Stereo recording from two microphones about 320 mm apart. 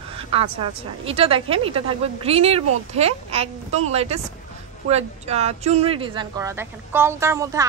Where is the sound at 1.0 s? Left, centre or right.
Centre.